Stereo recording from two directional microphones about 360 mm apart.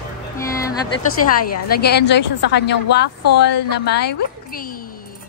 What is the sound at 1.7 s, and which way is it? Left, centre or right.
A woman's voice, left.